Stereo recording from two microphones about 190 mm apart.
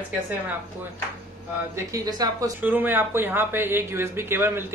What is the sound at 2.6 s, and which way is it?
Speech, 10° right (ahead or behind).